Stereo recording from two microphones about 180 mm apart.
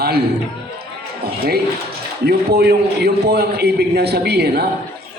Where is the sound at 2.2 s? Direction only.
60° right (ahead or behind).